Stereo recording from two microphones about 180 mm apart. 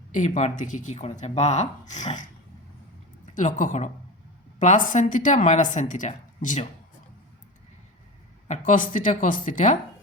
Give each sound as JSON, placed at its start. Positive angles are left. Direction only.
{"t": 0.1, "sound": "speech", "side_deg": 40}
{"t": 3.3, "sound": "a woman's voice", "side_deg": 45}
{"t": 8.4, "sound": "a woman's voice", "side_deg": 45}